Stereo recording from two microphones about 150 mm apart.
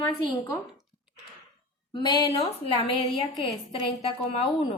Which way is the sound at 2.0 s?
25° left (ahead or behind).